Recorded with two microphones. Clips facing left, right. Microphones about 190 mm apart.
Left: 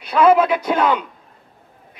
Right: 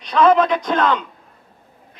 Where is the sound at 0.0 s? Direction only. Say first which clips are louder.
Left 1 dB; 5° left (ahead or behind).